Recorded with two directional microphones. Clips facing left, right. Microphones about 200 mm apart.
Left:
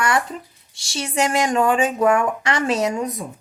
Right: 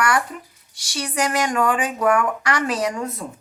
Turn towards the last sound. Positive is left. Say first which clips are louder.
# left 3 dB
turn(degrees=20)  # may be behind; listen again after turning